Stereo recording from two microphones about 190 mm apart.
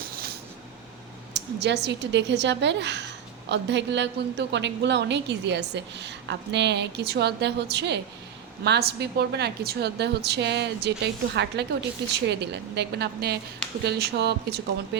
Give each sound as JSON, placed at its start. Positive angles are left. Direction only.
{"t": 1.3, "sound": "a woman's voice", "side_deg": -65}